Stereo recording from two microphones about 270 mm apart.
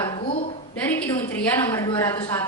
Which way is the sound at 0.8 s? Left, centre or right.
Centre.